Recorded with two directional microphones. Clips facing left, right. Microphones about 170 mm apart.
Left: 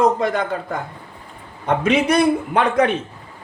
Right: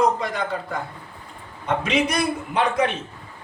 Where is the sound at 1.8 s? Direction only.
55° left (ahead or behind).